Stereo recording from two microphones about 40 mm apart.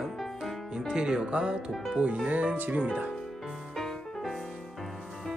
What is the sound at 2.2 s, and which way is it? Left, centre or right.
Speech, right.